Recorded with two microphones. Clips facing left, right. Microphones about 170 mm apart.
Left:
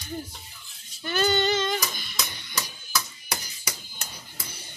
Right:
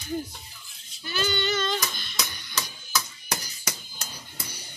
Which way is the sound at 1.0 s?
50° left (ahead or behind).